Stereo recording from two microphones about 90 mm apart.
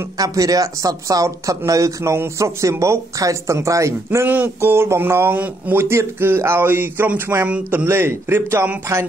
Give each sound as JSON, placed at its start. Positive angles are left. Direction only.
{"t": 0.2, "sound": "speech", "side_deg": -40}
{"t": 4.3, "sound": "speech", "side_deg": -20}